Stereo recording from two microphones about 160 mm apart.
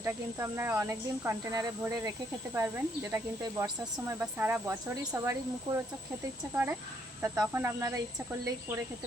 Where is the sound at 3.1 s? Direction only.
20° right (ahead or behind).